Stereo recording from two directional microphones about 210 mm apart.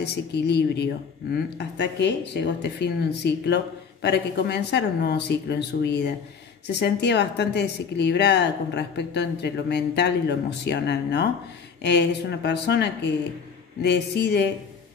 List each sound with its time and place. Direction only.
0.0 s speech: 50° left (ahead or behind)